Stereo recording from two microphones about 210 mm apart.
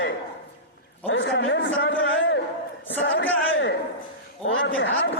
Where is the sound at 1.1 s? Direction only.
65° left (ahead or behind).